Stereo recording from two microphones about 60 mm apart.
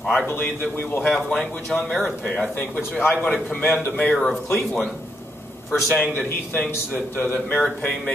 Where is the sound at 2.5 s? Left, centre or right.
Left.